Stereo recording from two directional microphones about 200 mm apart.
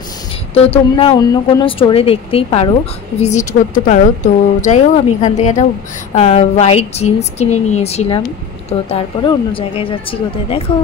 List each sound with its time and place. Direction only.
0.7 s a woman's voice: 25° left (ahead or behind)